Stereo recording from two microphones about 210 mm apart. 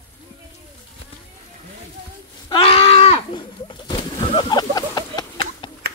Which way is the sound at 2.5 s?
25° left (ahead or behind).